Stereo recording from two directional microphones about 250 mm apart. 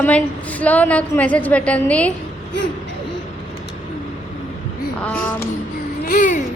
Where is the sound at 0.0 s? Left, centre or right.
Centre.